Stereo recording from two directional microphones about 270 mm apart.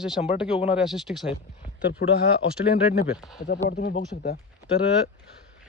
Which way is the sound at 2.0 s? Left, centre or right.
Left.